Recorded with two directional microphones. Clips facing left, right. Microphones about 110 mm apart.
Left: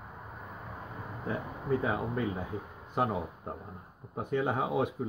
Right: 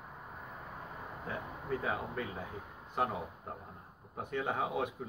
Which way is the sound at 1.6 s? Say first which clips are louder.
Left 6 dB; 20° left (ahead or behind).